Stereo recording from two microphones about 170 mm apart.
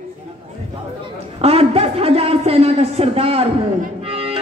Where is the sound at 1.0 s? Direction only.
35° right (ahead or behind).